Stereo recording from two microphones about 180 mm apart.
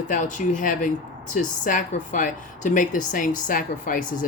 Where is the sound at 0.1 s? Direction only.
45° left (ahead or behind).